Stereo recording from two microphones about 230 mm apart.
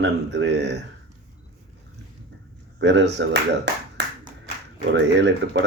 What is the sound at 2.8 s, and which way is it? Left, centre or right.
Speech, right.